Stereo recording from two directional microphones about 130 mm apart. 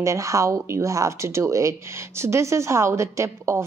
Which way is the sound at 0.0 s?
25° right (ahead or behind).